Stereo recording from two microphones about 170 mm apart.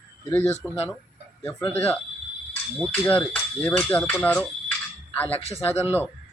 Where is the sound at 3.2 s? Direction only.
15° left (ahead or behind).